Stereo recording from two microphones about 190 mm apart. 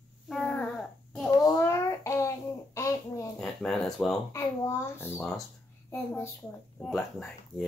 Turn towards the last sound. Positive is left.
turn(degrees=0)  # may be behind; listen again after turning